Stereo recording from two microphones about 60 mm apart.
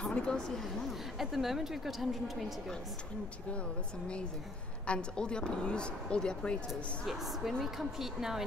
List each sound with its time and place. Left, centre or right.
0.0 s a woman's voice: centre
4.8 s speech: centre
6.7 s a woman's voice: centre